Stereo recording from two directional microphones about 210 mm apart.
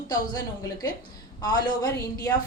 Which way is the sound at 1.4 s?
20° left (ahead or behind).